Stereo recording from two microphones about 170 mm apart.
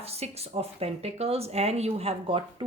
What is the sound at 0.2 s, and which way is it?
A woman's voice, 35° right (ahead or behind).